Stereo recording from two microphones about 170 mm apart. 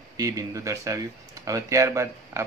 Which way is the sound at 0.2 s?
20° right (ahead or behind).